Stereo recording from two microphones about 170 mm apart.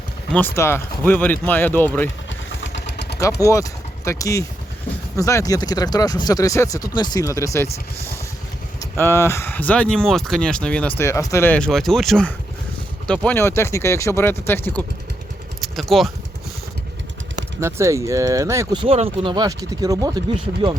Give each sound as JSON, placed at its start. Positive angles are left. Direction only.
{"t": 0.3, "sound": "speech", "side_deg": 15}
{"t": 2.5, "sound": "vehicle", "side_deg": 90}
{"t": 3.5, "sound": "speech", "side_deg": 15}
{"t": 8.8, "sound": "speech", "side_deg": 15}
{"t": 15.6, "sound": "speech", "side_deg": 0}
{"t": 17.6, "sound": "speech", "side_deg": -15}
{"t": 18.8, "sound": "speech", "side_deg": -35}